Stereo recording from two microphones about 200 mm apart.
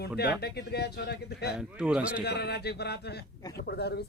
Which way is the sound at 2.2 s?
55° left (ahead or behind).